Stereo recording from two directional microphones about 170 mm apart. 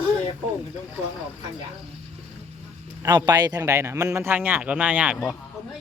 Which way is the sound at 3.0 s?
25° right (ahead or behind).